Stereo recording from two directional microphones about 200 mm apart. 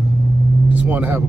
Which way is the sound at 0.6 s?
10° right (ahead or behind).